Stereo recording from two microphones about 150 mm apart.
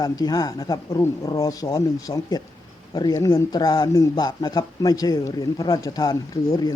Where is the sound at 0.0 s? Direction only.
25° left (ahead or behind).